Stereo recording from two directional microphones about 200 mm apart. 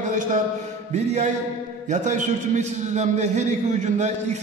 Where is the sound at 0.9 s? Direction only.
35° right (ahead or behind).